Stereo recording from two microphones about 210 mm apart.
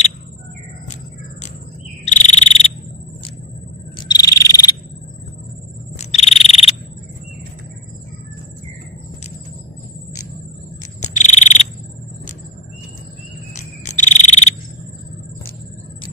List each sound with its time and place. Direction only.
2.0 s frog: 35° left (ahead or behind)
4.1 s frog: 15° left (ahead or behind)
5.9 s cricket: 30° left (ahead or behind)
11.0 s frog: 35° left (ahead or behind)
13.8 s frog: 35° left (ahead or behind)